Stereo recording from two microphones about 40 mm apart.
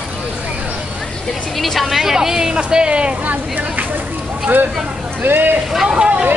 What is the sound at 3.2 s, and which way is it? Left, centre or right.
Speech, right.